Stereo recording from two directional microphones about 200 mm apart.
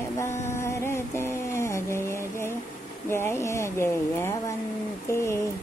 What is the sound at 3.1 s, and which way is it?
Speech, 10° left (ahead or behind).